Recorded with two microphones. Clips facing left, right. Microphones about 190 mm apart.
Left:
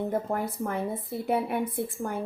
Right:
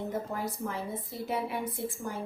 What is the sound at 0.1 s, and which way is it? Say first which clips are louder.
A woman's voice: left 5 dB; 55° left (ahead or behind).